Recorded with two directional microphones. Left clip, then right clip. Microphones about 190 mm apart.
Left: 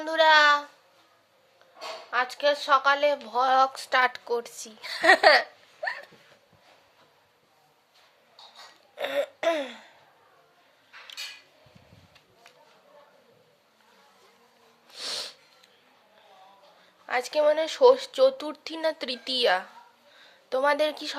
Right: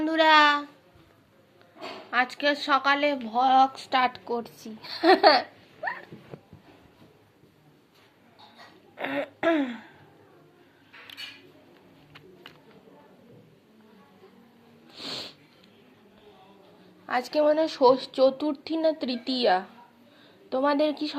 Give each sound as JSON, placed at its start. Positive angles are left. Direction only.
{"t": 0.0, "sound": "a sound", "side_deg": 20}
{"t": 2.0, "sound": "a woman's voice", "side_deg": 20}
{"t": 3.2, "sound": "a woman's voice", "side_deg": 35}
{"t": 9.0, "sound": "a sound", "side_deg": 35}
{"t": 14.9, "sound": "wheeze", "side_deg": 30}
{"t": 17.1, "sound": "a woman's voice", "side_deg": 35}